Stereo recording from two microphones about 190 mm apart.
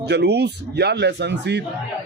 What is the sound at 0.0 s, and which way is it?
Speech, 60° right (ahead or behind).